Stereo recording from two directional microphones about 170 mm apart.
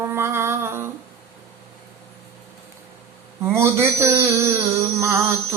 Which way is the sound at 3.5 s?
15° right (ahead or behind).